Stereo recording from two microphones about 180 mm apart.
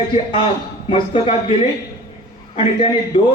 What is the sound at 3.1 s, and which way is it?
Speech, 30° left (ahead or behind).